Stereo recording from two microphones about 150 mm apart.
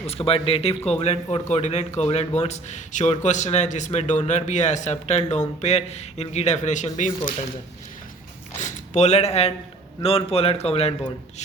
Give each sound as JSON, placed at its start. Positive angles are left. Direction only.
{"t": 0.1, "sound": "a man's voice", "side_deg": 40}
{"t": 8.5, "sound": "a man's voice", "side_deg": 55}